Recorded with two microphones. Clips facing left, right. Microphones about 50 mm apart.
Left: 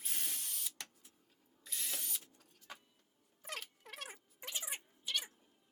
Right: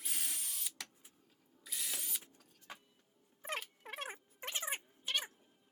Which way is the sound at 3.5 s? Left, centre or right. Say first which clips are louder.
Right 4 dB; right.